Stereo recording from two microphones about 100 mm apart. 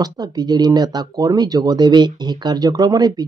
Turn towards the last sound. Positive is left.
turn(degrees=-40)  # may be behind; listen again after turning